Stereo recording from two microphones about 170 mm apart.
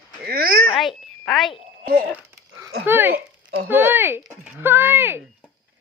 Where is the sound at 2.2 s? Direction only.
15° right (ahead or behind).